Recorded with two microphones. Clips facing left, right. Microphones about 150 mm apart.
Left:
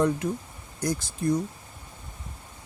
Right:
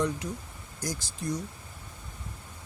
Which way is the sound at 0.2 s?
55° left (ahead or behind).